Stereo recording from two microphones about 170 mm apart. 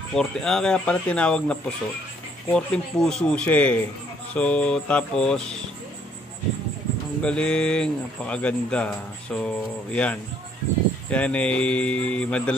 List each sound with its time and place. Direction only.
0.1 s speech: 5° left (ahead or behind)
7.2 s speech: 5° left (ahead or behind)